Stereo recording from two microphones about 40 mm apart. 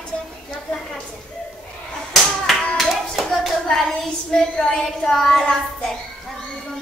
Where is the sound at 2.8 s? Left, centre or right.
Centre.